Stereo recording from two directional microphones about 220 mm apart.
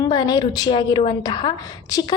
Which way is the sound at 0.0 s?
20° left (ahead or behind).